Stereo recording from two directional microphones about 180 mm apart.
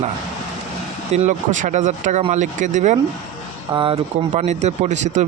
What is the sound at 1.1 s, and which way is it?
Speech, 40° right (ahead or behind).